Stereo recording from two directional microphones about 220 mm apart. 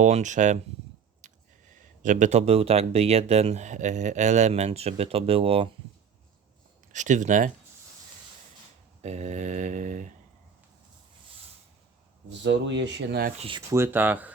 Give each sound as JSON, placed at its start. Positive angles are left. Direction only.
{"t": 0.0, "sound": "speech", "side_deg": -35}
{"t": 1.2, "sound": "a sound", "side_deg": -35}
{"t": 2.0, "sound": "speech", "side_deg": -35}
{"t": 6.9, "sound": "speech", "side_deg": -35}
{"t": 9.0, "sound": "mantra", "side_deg": -30}
{"t": 12.3, "sound": "speech", "side_deg": -55}
{"t": 13.7, "sound": "speech", "side_deg": -10}